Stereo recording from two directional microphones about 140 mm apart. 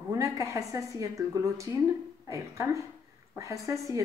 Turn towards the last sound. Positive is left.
turn(degrees=-25)  # may be behind; listen again after turning